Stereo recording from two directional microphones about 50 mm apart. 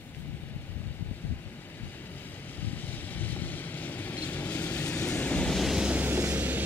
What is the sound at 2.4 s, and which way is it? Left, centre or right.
Vehicle, left.